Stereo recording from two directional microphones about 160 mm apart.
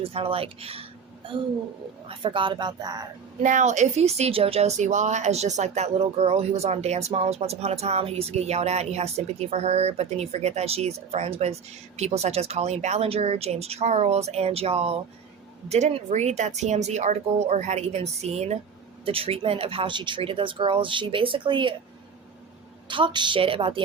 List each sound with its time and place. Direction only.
0.0 s a woman's voice: 35° right (ahead or behind)
3.4 s a woman's voice: 50° right (ahead or behind); by 21.8 s 30° right (ahead or behind)
22.9 s a woman's voice: 30° right (ahead or behind)